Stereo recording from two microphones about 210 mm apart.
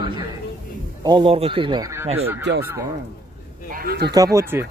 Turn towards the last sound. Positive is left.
turn(degrees=-15)  # may be behind; listen again after turning